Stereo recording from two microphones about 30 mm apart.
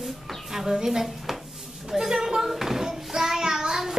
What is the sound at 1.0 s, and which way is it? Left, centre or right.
Dishes, centre.